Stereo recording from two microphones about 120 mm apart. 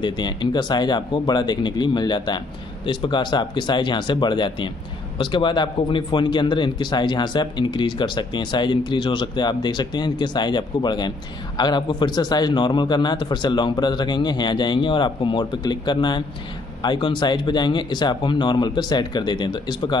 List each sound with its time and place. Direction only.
0.0 s speech: 40° left (ahead or behind)